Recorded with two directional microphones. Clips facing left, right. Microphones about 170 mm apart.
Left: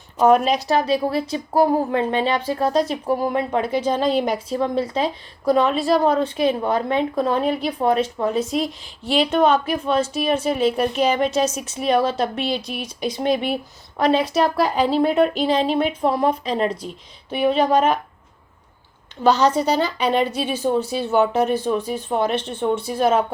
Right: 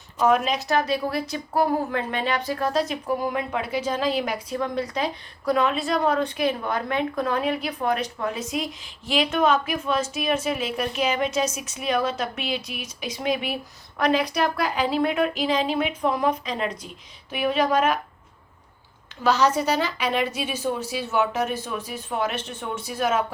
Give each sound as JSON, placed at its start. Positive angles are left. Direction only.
{"t": 0.2, "sound": "a woman's voice", "side_deg": 35}
{"t": 19.2, "sound": "a woman's voice", "side_deg": 30}